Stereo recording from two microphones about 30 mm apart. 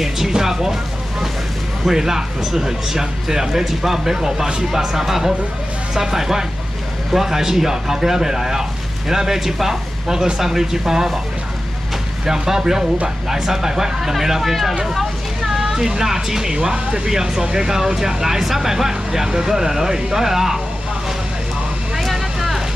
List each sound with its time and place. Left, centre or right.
0.3 s speech: centre
1.9 s speech: centre
12.3 s speech: centre
15.0 s a sound: centre
15.9 s speech: centre
21.9 s vehicle: centre